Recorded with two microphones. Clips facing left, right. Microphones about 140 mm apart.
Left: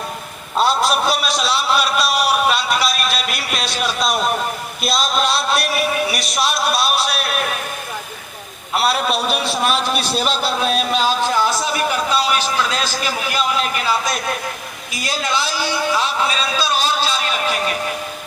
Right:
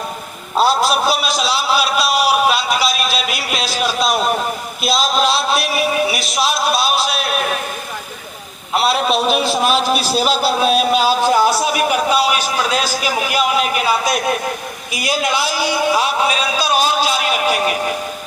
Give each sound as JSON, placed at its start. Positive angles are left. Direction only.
{"t": 0.6, "sound": "a man's voice", "side_deg": 0}
{"t": 8.7, "sound": "a man's voice", "side_deg": 0}
{"t": 14.9, "sound": "a sound", "side_deg": -15}